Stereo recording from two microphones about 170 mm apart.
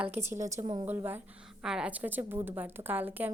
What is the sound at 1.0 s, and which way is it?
A woman's voice, 10° right (ahead or behind).